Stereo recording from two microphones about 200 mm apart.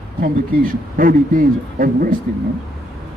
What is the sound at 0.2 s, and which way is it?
A man's voice, 45° right (ahead or behind).